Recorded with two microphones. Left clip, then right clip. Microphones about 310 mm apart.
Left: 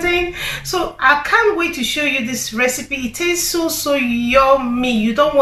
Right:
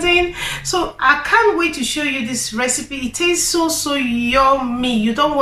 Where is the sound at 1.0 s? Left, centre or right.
Centre.